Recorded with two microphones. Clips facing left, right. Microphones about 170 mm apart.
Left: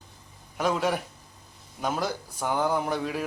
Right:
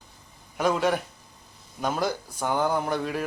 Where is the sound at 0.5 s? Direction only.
Centre (ahead or behind).